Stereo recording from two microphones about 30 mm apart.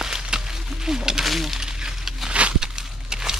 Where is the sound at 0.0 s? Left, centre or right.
Centre.